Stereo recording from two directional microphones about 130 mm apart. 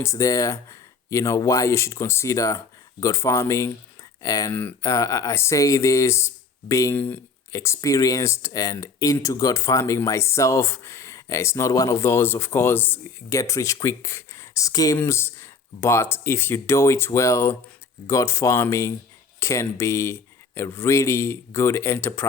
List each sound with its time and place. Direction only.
0.0 s speech: 25° left (ahead or behind)
4.5 s speech: 15° left (ahead or behind)
4.9 s speech: 25° left (ahead or behind)